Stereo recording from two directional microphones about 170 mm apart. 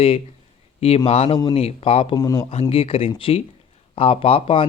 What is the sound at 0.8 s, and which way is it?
Speech, 35° left (ahead or behind).